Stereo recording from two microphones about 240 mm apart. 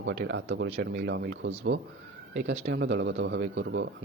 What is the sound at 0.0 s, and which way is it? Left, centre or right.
A man's voice, right.